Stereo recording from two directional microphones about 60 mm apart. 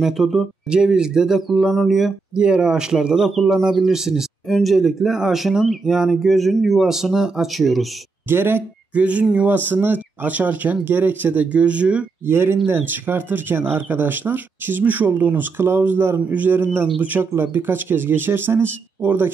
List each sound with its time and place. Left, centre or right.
0.0 s speech: centre
0.7 s speech: centre
2.3 s speech: centre
8.3 s speech: right
8.9 s speech: right
9.7 s speech: right
12.3 s speech: right